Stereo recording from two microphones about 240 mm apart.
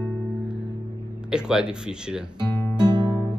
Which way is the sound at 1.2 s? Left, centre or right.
Centre.